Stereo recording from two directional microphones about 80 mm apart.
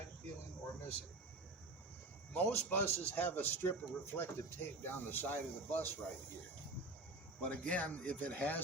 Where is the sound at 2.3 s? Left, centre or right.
Left.